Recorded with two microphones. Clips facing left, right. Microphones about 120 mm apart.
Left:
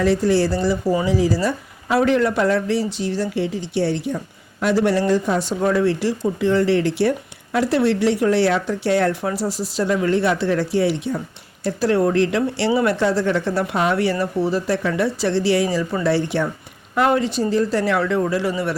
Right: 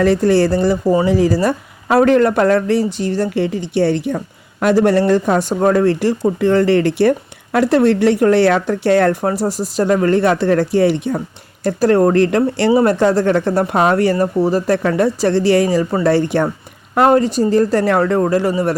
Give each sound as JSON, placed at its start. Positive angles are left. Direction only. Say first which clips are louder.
{"t": 0.0, "sound": "speech", "louder": "right 4 dB", "side_deg": -55}